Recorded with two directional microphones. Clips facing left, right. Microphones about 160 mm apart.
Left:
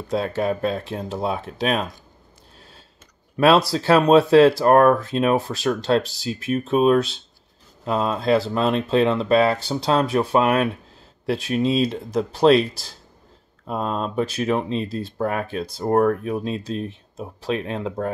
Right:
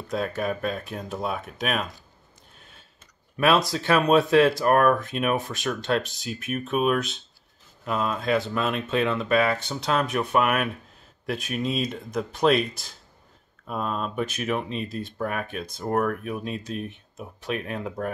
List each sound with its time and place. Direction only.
0.1 s speech: 30° left (ahead or behind)
3.3 s speech: 35° left (ahead or behind)